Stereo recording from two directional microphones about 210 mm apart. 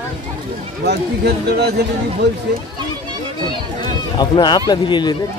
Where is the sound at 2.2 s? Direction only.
55° right (ahead or behind).